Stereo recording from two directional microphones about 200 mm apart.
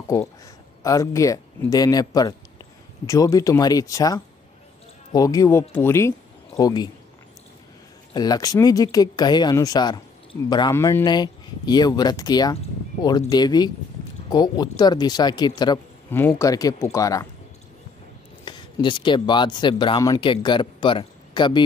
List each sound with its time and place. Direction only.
0.8 s a man's voice: 15° left (ahead or behind)
8.1 s speech: 20° left (ahead or behind)
18.4 s speech: 25° left (ahead or behind)